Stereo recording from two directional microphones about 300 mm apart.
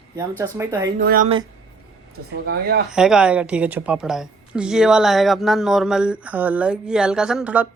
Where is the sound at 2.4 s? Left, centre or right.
Right.